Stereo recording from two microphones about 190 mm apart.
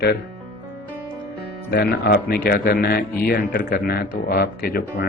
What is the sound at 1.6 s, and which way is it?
Speech, 60° left (ahead or behind).